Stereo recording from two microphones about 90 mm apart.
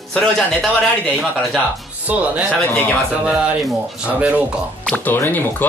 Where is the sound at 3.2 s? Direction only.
15° right (ahead or behind).